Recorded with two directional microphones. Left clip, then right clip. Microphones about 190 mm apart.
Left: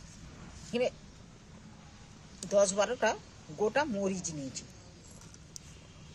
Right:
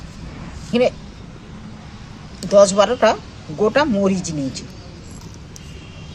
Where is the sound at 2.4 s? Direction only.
15° left (ahead or behind).